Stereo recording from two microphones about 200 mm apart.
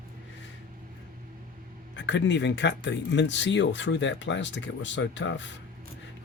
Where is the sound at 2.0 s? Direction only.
65° left (ahead or behind).